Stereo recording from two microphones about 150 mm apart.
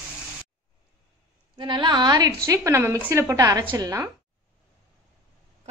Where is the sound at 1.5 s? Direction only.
30° right (ahead or behind).